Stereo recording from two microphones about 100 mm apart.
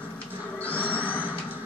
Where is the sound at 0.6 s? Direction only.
15° left (ahead or behind).